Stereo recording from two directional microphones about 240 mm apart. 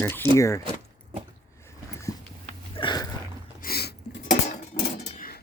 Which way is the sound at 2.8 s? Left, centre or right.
Centre.